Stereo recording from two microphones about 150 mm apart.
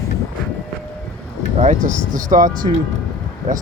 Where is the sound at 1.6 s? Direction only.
55° right (ahead or behind).